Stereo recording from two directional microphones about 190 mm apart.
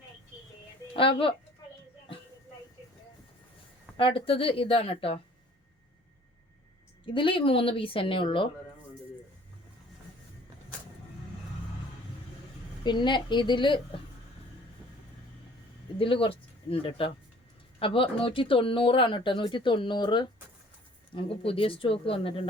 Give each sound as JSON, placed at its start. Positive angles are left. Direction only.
{"t": 0.9, "sound": "speech", "side_deg": 30}
{"t": 3.9, "sound": "speech", "side_deg": 30}
{"t": 7.0, "sound": "speech", "side_deg": 25}
{"t": 12.8, "sound": "speech", "side_deg": 25}
{"t": 16.0, "sound": "speech", "side_deg": 30}